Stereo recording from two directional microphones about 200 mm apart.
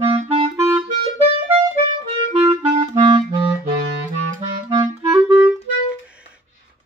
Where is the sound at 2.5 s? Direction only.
25° right (ahead or behind).